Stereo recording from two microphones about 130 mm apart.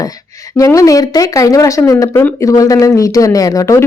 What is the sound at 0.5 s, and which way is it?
Speech, 25° left (ahead or behind).